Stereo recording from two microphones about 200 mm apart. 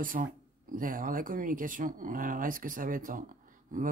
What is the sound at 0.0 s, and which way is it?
Speech, 45° right (ahead or behind).